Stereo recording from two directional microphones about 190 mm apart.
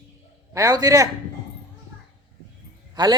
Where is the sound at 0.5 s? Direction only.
20° right (ahead or behind).